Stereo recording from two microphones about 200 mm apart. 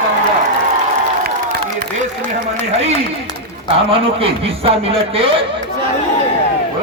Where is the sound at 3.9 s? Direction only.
30° right (ahead or behind).